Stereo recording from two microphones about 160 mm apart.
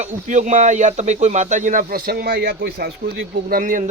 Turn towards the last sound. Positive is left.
turn(degrees=-55)  # may be behind; listen again after turning